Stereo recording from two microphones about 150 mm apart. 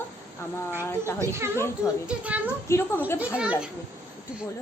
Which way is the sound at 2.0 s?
10° right (ahead or behind).